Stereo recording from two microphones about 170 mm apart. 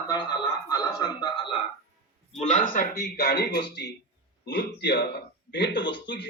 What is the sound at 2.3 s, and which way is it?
A man's voice, 40° left (ahead or behind).